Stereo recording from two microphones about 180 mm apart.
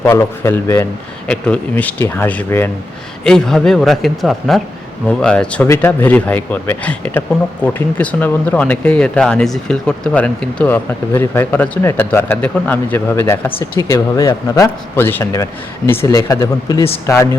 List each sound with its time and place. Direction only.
0.0 s a man's voice: 15° left (ahead or behind)